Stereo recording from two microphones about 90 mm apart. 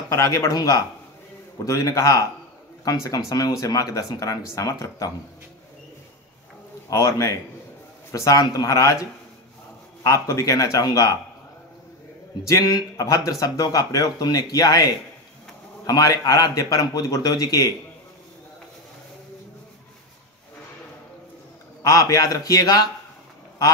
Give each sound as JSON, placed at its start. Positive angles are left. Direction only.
{"t": 0.1, "sound": "speech", "side_deg": 35}
{"t": 6.9, "sound": "speech", "side_deg": 35}
{"t": 10.0, "sound": "speech", "side_deg": 35}
{"t": 12.4, "sound": "speech", "side_deg": 45}
{"t": 21.8, "sound": "speech", "side_deg": 40}